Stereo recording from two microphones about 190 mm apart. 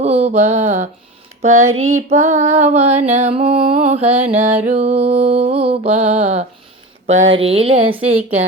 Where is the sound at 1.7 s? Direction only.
90° right.